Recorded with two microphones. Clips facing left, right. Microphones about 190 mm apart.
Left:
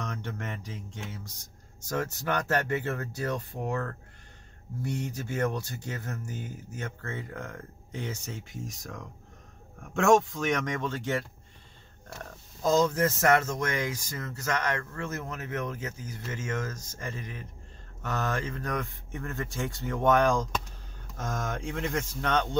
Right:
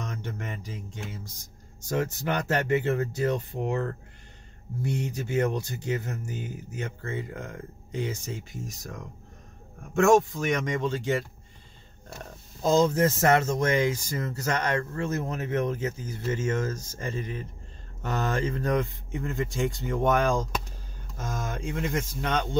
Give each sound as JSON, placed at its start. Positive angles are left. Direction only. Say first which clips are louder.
{"t": 0.4, "sound": "speech", "louder": "right 1 dB", "side_deg": -10}
{"t": 1.9, "sound": "speech", "louder": "right 3 dB", "side_deg": -20}
{"t": 9.9, "sound": "speech", "louder": "right 2 dB", "side_deg": -5}
{"t": 12.6, "sound": "speech", "louder": "right 3 dB", "side_deg": -30}